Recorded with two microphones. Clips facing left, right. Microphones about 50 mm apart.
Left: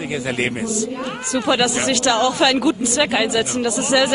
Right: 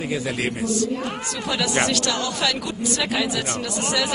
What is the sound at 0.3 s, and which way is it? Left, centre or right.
A woman's voice, left.